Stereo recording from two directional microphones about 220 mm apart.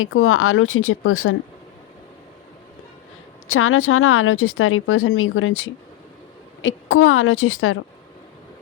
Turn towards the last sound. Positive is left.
turn(degrees=65)  # may be behind; listen again after turning